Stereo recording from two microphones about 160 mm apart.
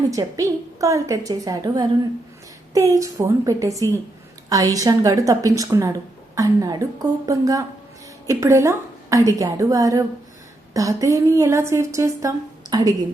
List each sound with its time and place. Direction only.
0.1 s a woman's voice: 20° right (ahead or behind)